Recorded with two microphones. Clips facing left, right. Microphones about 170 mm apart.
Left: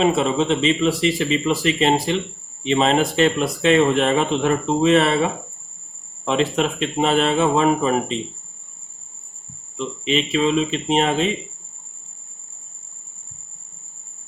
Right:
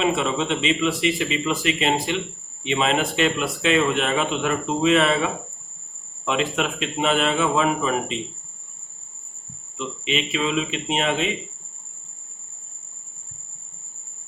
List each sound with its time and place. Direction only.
0.0 s speech: 35° left (ahead or behind)
9.7 s speech: 35° left (ahead or behind)